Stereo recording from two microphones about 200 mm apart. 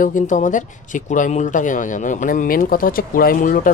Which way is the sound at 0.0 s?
40° left (ahead or behind).